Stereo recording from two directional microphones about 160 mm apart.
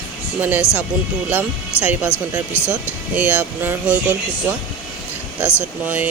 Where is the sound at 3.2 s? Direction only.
10° right (ahead or behind).